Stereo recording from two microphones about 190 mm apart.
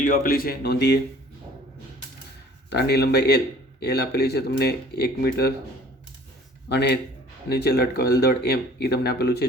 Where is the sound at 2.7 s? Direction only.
60° left (ahead or behind).